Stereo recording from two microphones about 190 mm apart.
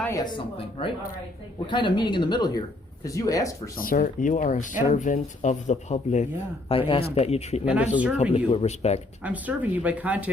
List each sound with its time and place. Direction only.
0.0 s speech: 20° left (ahead or behind)
3.8 s speech: 45° left (ahead or behind)
6.7 s speech: 30° left (ahead or behind)
7.6 s speech: 5° right (ahead or behind)
8.2 s speech: 35° left (ahead or behind)
9.2 s speech: 10° right (ahead or behind)